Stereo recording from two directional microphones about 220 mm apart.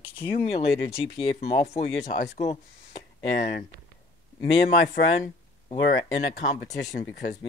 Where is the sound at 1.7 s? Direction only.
30° left (ahead or behind).